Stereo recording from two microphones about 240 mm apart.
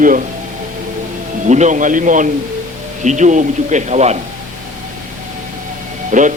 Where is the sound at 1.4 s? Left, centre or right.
Right.